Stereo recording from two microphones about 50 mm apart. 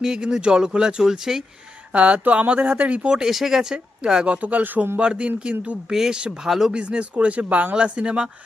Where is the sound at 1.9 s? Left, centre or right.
Right.